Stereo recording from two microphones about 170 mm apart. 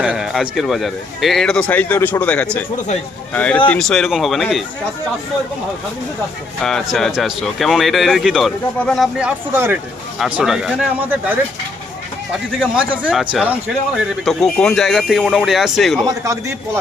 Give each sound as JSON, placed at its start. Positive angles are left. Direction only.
{"t": 0.0, "sound": "a man's voice", "side_deg": -5}
{"t": 6.6, "sound": "a man's voice", "side_deg": 5}
{"t": 16.0, "sound": "a man's voice", "side_deg": -20}